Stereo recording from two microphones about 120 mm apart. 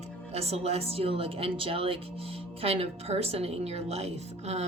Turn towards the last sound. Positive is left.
turn(degrees=-65)  # may be behind; listen again after turning